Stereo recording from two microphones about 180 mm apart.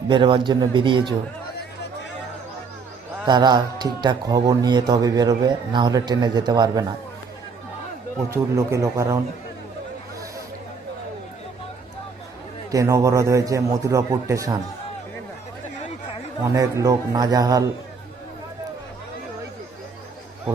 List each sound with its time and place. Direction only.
0.1 s speech: 25° right (ahead or behind)
3.2 s speech: 25° right (ahead or behind)
8.3 s a man's voice: 15° right (ahead or behind)
12.7 s a man's voice: 15° right (ahead or behind)
16.6 s speech: 20° right (ahead or behind)